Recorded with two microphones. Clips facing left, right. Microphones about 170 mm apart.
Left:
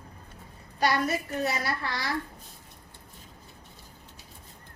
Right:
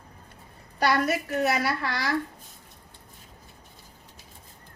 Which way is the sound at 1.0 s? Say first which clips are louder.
Right 4 dB; 70° right (ahead or behind).